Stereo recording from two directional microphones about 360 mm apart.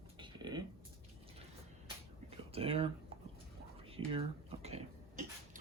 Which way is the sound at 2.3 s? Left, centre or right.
Centre.